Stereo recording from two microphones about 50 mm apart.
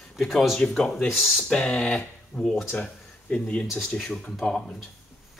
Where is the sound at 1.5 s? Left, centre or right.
Left.